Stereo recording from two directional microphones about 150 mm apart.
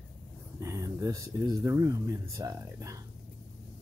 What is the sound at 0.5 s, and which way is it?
Speech, 20° right (ahead or behind).